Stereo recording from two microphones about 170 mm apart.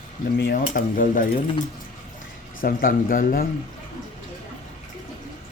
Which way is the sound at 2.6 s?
55° left (ahead or behind).